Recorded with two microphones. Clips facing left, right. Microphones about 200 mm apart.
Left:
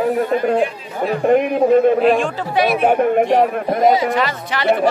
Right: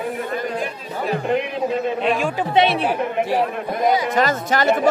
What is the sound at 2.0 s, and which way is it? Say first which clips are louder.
Speech: left 6 dB; centre (ahead or behind).